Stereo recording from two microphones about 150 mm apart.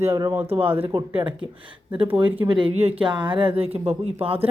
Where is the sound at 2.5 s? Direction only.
35° right (ahead or behind).